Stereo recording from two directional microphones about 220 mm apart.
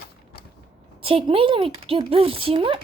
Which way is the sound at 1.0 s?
25° right (ahead or behind).